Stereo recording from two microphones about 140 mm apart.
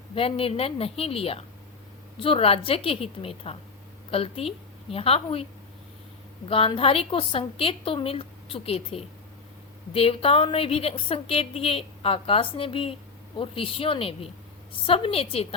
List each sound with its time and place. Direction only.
0.1 s a woman's voice: 45° left (ahead or behind)
6.5 s a woman's voice: 40° left (ahead or behind)